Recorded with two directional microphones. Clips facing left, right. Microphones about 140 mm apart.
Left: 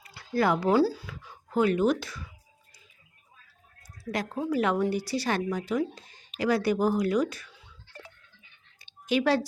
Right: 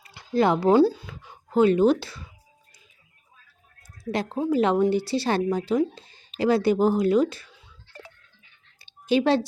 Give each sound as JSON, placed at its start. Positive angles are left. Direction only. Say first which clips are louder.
{"t": 0.0, "sound": "speech", "louder": "right 4 dB", "side_deg": -25}
{"t": 4.1, "sound": "speech", "louder": "right 5 dB", "side_deg": -25}
{"t": 8.8, "sound": "a sound", "louder": "right 4 dB", "side_deg": -30}